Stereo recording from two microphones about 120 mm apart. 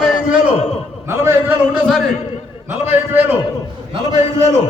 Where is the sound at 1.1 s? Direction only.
20° right (ahead or behind).